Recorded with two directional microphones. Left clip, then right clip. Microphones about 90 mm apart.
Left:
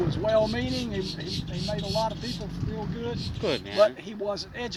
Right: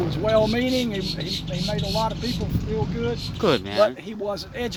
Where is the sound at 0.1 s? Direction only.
55° right (ahead or behind).